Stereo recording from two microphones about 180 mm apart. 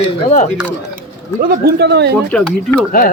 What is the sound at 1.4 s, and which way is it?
Speech, 60° right (ahead or behind).